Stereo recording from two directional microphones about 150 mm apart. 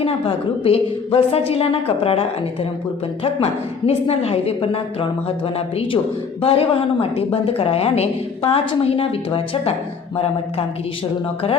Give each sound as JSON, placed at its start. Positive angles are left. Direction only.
{"t": 0.0, "sound": "a woman's voice", "side_deg": 40}